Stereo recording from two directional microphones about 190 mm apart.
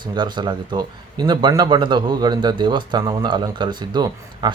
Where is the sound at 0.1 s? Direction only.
25° right (ahead or behind).